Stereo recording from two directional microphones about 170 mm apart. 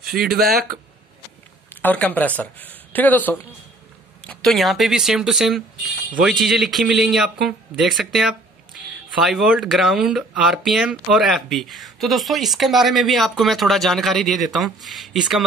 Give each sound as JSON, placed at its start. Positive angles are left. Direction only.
{"t": 0.2, "sound": "speech", "side_deg": -60}
{"t": 1.7, "sound": "speech", "side_deg": 10}